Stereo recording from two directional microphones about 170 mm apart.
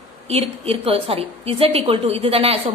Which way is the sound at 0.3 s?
35° right (ahead or behind).